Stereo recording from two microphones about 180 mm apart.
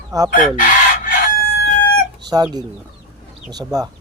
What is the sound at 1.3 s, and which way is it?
Crowing, 65° left (ahead or behind).